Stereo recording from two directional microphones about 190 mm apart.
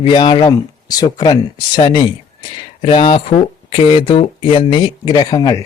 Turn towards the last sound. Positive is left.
turn(degrees=20)  # may be behind; listen again after turning